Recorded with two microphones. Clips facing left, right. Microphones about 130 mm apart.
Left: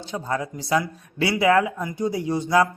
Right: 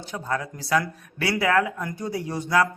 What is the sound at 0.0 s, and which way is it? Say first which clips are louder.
Speech: left 2 dB; 20° left (ahead or behind).